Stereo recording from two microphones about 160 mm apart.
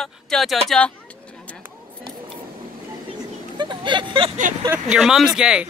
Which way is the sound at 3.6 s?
30° right (ahead or behind).